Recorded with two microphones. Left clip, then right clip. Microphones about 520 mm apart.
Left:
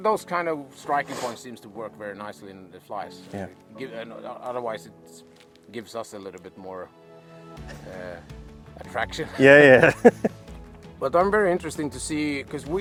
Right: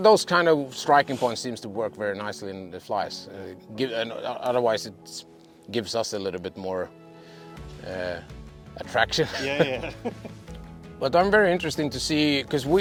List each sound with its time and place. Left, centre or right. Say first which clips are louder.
0.0 s speech: right 6 dB; right
9.5 s speech: left 13 dB; left
11.0 s speech: right 1 dB; centre; by 12.6 s right